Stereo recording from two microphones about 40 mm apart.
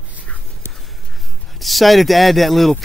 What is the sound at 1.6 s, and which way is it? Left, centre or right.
Speech, centre.